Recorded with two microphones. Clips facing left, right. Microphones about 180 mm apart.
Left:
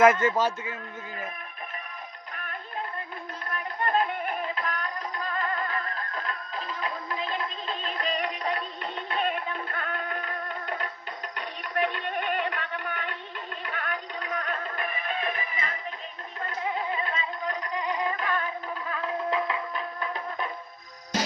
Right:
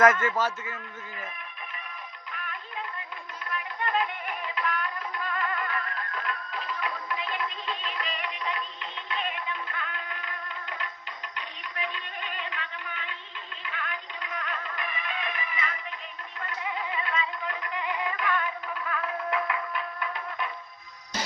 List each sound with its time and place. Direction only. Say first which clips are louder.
0.0 s a man's voice: left 2 dB; 20° left (ahead or behind)
2.3 s music: left 2 dB; 40° left (ahead or behind)
11.3 s a sound: left 9 dB; 55° left (ahead or behind)
13.6 s music: left 3 dB; 50° left (ahead or behind)